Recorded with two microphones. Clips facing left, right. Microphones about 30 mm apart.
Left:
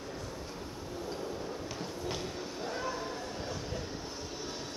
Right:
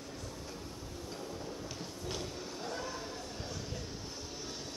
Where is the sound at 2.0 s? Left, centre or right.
Centre.